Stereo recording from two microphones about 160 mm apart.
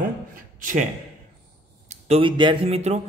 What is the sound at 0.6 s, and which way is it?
Speech, 55° right (ahead or behind).